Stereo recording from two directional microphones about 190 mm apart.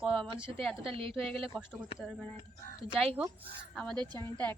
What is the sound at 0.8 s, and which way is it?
Speech, 30° right (ahead or behind).